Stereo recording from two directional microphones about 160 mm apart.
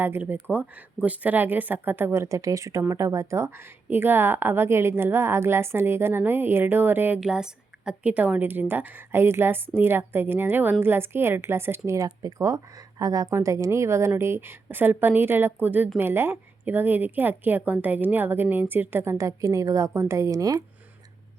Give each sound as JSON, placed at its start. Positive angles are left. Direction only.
{"t": 0.0, "sound": "a woman's voice", "side_deg": -15}